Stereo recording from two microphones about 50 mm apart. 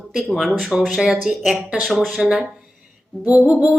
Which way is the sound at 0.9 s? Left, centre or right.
Centre.